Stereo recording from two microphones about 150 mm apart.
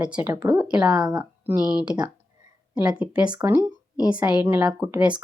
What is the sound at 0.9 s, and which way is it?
Speech, 25° right (ahead or behind).